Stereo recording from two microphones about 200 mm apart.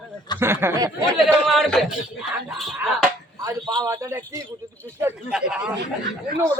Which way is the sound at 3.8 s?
15° right (ahead or behind).